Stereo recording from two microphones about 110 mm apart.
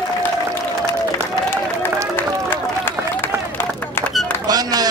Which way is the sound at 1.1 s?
20° left (ahead or behind).